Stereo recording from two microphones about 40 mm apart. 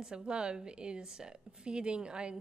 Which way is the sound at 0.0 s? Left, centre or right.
Right.